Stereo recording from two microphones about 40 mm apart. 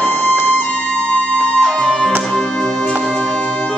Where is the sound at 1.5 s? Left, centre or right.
Left.